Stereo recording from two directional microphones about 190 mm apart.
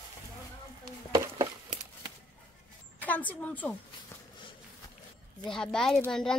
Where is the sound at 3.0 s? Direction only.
10° left (ahead or behind).